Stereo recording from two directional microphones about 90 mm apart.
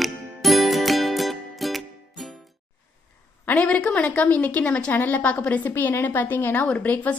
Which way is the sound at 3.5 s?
15° left (ahead or behind).